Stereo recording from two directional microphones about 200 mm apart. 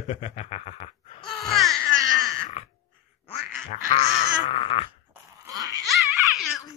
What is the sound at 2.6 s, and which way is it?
Dog, 30° left (ahead or behind).